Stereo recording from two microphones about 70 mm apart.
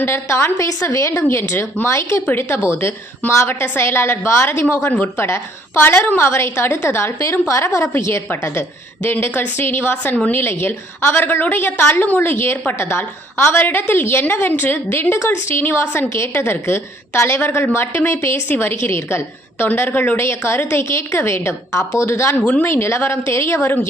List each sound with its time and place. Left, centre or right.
0.0 s a woman's voice: left
0.5 s a woman's voice: left
2.2 s a woman's voice: left
4.8 s a woman's voice: left
5.1 s a woman's voice: left
7.2 s a woman's voice: left
18.4 s a woman's voice: left
22.4 s a woman's voice: left
22.6 s a woman's voice: left